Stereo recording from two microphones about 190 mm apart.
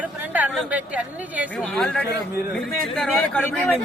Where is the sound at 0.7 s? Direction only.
5° right (ahead or behind).